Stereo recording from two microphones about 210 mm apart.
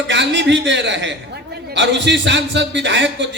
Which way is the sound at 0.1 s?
60° right (ahead or behind).